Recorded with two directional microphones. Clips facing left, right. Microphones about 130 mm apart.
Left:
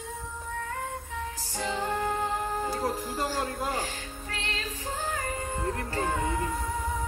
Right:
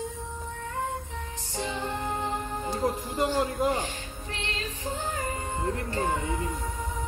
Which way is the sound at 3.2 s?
20° right (ahead or behind).